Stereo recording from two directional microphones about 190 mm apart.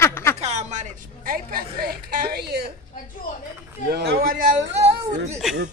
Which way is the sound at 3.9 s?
55° right (ahead or behind).